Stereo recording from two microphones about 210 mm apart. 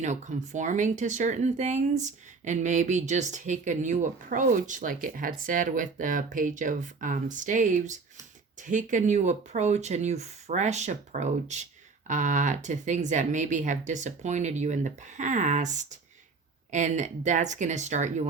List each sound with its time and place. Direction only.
0.0 s speech: 35° right (ahead or behind)